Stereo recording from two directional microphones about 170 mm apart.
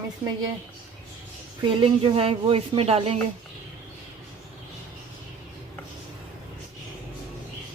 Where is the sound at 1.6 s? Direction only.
30° right (ahead or behind).